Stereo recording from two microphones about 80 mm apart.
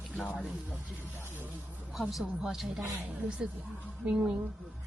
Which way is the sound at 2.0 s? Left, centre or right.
Centre.